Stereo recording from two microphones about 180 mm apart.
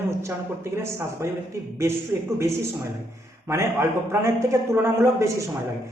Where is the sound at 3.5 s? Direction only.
15° right (ahead or behind).